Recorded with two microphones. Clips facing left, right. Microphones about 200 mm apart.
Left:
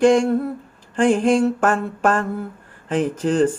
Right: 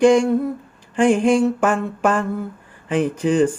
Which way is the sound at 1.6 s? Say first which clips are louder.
Even; 15° right (ahead or behind).